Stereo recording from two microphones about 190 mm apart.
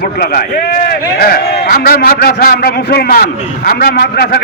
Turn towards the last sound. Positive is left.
turn(degrees=55)  # may be behind; listen again after turning